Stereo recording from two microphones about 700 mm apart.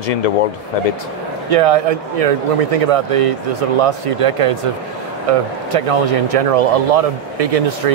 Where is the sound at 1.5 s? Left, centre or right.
Right.